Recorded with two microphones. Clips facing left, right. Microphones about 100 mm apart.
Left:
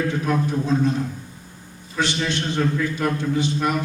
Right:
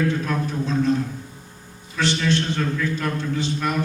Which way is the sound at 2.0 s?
15° left (ahead or behind).